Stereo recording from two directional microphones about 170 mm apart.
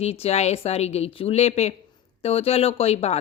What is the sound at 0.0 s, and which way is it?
Speech, 35° left (ahead or behind).